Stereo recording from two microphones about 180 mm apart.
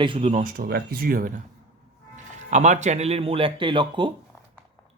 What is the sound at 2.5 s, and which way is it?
Speech, 40° right (ahead or behind).